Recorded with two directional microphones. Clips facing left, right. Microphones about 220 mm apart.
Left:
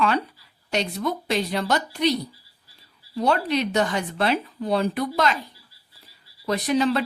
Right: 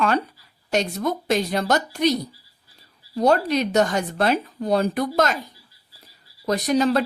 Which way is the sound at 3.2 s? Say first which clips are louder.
Right 3 dB; 45° right (ahead or behind).